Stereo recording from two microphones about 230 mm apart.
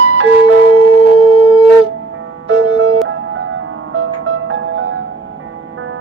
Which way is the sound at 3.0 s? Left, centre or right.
Right.